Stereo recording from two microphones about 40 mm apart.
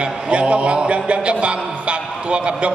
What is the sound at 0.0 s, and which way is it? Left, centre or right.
Speech, right.